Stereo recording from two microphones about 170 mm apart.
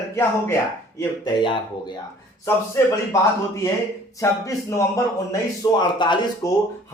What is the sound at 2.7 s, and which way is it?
A man's voice, 20° left (ahead or behind).